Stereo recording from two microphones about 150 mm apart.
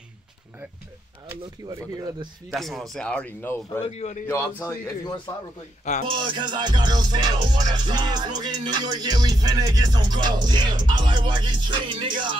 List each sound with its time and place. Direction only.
1.3 s music: 20° right (ahead or behind)
2.5 s a man's voice: centre (ahead or behind)
3.8 s a man's voice: 45° left (ahead or behind)
4.3 s a man's voice: 15° left (ahead or behind)
6.0 s music: 30° right (ahead or behind)